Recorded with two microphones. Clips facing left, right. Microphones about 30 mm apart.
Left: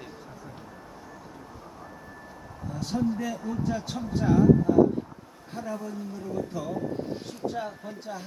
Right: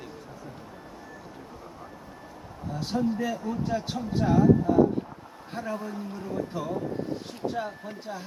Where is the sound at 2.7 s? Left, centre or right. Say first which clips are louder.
Right 1 dB; right.